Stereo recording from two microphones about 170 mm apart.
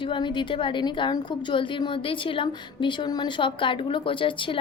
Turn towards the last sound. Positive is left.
turn(degrees=30)  # may be behind; listen again after turning